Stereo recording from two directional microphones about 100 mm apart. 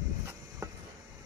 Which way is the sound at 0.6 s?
35° right (ahead or behind).